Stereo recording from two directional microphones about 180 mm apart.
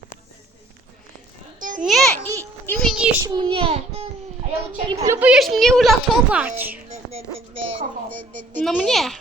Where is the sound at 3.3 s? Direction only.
25° right (ahead or behind).